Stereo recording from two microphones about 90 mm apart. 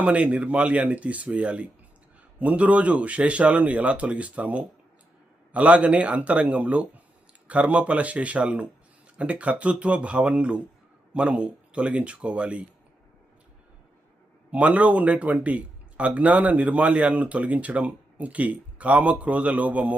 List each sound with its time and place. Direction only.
0.0 s speech: 15° right (ahead or behind)
14.5 s speech: 15° right (ahead or behind)